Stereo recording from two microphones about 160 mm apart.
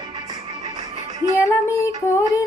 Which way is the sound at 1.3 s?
15° left (ahead or behind).